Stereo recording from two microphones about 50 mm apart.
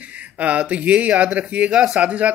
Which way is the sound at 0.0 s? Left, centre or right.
Right.